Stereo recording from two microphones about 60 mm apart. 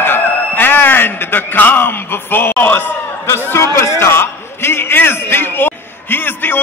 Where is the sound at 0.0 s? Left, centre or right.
Left.